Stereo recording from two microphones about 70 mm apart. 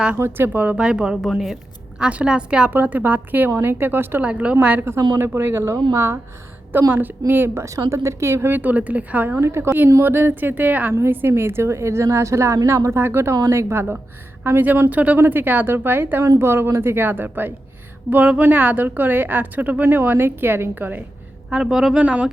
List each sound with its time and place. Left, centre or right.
0.2 s a woman's voice: right
0.8 s a woman's voice: centre
2.0 s a woman's voice: centre
2.6 s a woman's voice: right
4.8 s a woman's voice: right
6.9 s a woman's voice: right
9.4 s a woman's voice: right
21.5 s a woman's voice: centre
22.0 s a woman's voice: centre